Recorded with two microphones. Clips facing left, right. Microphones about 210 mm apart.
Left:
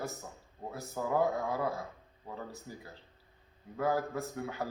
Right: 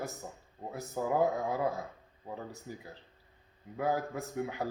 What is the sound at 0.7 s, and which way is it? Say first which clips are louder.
Speech: right 1 dB; 20° right (ahead or behind).